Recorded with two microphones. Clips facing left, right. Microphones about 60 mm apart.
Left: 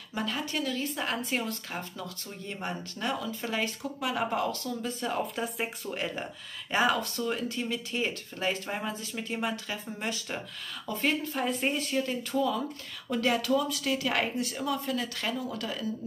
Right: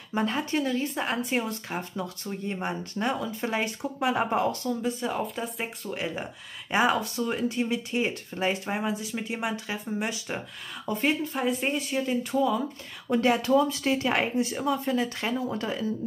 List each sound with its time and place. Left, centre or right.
0.1 s speech: right
5.0 s speech: centre
6.7 s speech: centre
11.3 s speech: centre; by 15.9 s right